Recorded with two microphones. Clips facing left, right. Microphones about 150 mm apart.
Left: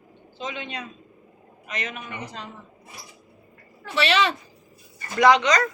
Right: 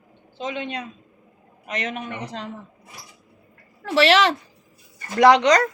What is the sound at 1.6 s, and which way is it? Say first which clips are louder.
Speech: right 5 dB; 70° right (ahead or behind).